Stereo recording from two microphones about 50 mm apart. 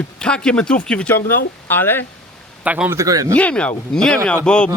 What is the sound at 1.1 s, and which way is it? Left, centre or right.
Speech, left.